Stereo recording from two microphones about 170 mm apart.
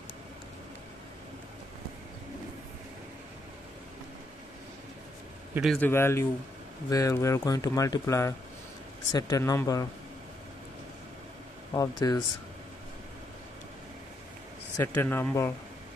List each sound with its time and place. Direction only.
5.5 s a man's voice: 5° right (ahead or behind)
5.8 s speech: 15° left (ahead or behind)
11.7 s speech: 20° left (ahead or behind)
14.8 s speech: 15° left (ahead or behind)